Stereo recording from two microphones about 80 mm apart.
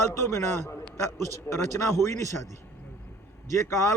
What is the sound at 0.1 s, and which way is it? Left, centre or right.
A man's voice, left.